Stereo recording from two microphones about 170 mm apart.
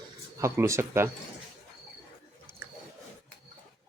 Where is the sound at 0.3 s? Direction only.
15° right (ahead or behind).